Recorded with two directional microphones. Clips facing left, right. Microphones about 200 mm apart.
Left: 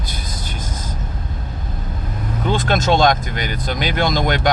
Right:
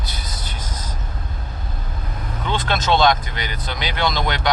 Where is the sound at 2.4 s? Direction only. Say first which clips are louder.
Left 4 dB; 45° left (ahead or behind).